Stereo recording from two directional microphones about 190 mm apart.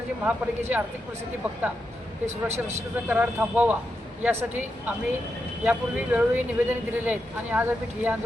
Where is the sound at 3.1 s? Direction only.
10° right (ahead or behind).